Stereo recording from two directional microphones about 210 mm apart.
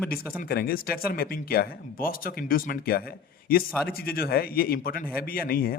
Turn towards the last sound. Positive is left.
turn(degrees=45)  # may be behind; listen again after turning